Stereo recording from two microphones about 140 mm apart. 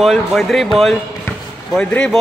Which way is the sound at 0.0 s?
Centre (ahead or behind).